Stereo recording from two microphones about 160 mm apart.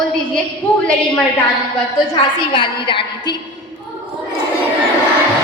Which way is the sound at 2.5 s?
30° left (ahead or behind).